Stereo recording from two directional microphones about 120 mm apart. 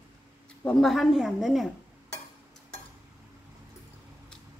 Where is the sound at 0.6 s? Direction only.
5° left (ahead or behind).